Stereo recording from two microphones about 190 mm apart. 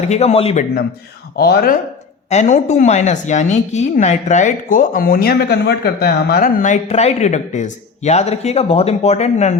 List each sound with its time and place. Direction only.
0.1 s a woman's voice: 35° left (ahead or behind)
1.4 s speech: 55° left (ahead or behind)
2.3 s a woman's voice: 35° left (ahead or behind)